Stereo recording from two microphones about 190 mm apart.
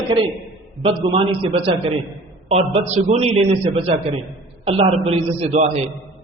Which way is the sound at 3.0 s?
35° right (ahead or behind).